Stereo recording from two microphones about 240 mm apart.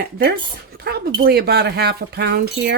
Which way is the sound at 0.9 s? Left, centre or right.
Right.